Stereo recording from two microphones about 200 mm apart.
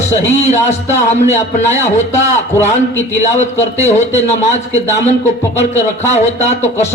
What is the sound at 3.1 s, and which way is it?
A man's voice, 35° left (ahead or behind).